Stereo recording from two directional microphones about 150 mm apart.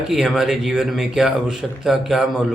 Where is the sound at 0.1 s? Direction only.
5° right (ahead or behind).